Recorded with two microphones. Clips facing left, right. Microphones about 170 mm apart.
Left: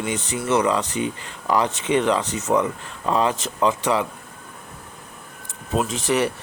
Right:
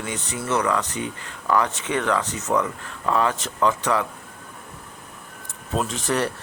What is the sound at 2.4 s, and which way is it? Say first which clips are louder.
Speech: left 3 dB; 20° left (ahead or behind).